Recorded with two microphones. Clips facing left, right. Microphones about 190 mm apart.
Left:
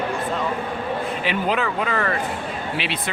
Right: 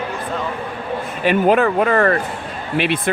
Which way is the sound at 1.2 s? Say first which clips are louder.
Right 11 dB; 50° right (ahead or behind).